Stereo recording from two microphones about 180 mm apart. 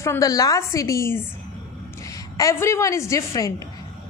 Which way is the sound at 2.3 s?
15° left (ahead or behind).